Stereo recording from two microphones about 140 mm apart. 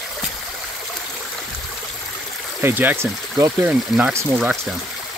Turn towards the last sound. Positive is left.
turn(degrees=-15)  # may be behind; listen again after turning